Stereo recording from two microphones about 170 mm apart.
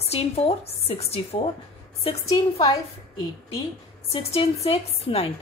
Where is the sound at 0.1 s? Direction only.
35° left (ahead or behind).